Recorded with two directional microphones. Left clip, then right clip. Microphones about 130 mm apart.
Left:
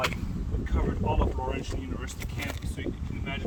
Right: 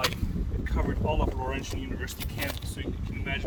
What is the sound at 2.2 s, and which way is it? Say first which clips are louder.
Speech: right 3 dB; 25° right (ahead or behind).